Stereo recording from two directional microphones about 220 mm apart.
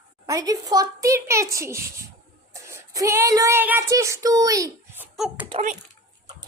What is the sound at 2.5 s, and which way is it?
Child singing, 15° right (ahead or behind).